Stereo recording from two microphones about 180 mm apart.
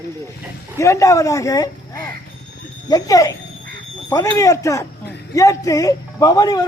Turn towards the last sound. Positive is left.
turn(degrees=20)  # may be behind; listen again after turning